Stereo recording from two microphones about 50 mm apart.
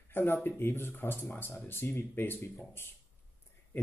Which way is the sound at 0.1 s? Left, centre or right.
Left.